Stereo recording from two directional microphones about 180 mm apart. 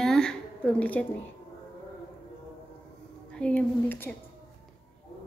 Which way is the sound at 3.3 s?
5° left (ahead or behind).